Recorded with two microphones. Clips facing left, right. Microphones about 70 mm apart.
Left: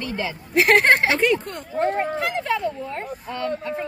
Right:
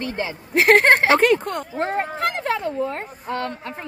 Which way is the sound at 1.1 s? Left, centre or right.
Right.